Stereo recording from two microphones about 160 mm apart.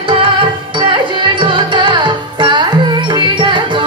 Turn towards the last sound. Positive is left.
turn(degrees=-30)  # may be behind; listen again after turning